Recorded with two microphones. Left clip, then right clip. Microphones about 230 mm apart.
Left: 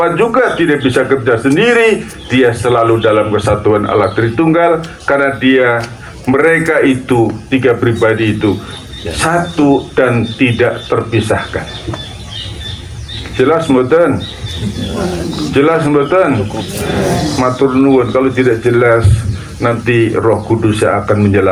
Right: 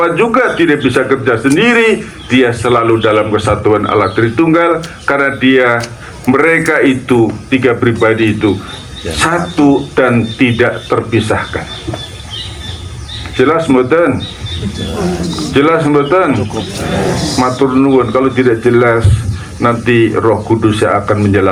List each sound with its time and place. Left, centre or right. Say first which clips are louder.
0.0 s a man's voice: even; right
13.3 s a man's voice: right 1 dB; right
15.5 s a man's voice: right 1 dB; right
17.3 s a man's voice: right 1 dB; right